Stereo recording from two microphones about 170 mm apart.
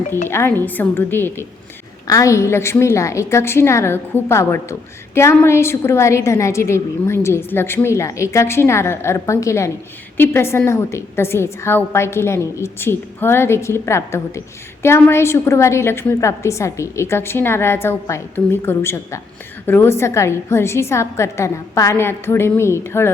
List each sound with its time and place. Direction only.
0.3 s a woman's voice: 15° left (ahead or behind)